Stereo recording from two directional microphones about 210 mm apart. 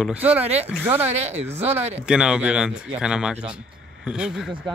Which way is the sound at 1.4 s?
30° right (ahead or behind).